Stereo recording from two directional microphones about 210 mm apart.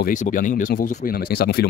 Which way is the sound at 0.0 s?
40° left (ahead or behind).